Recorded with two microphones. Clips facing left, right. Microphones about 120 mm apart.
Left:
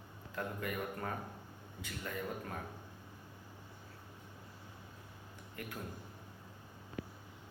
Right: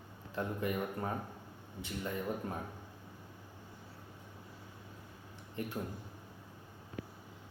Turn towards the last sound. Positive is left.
turn(degrees=-25)  # may be behind; listen again after turning